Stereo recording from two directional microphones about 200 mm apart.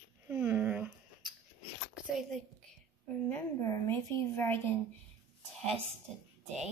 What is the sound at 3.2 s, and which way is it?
A woman's voice, 10° left (ahead or behind).